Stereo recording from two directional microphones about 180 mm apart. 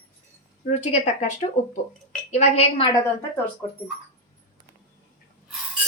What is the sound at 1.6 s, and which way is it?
A woman's voice, 40° left (ahead or behind).